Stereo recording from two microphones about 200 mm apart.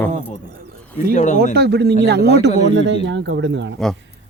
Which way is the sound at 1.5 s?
55° right (ahead or behind).